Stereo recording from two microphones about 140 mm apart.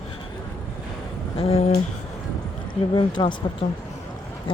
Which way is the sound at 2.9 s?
35° left (ahead or behind).